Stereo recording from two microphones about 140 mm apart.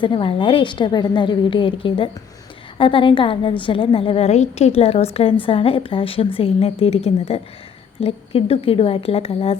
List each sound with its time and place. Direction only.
0.0 s a woman's voice: 35° left (ahead or behind)